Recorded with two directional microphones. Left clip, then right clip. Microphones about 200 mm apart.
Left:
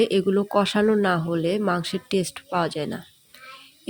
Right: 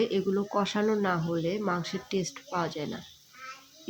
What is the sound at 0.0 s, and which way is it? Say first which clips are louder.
Speech: left 7 dB; 30° left (ahead or behind).